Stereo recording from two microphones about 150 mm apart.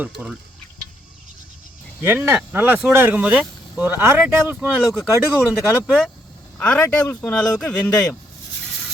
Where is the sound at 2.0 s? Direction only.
15° right (ahead or behind).